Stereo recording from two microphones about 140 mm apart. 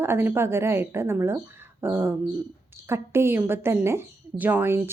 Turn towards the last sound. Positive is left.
turn(degrees=-15)  # may be behind; listen again after turning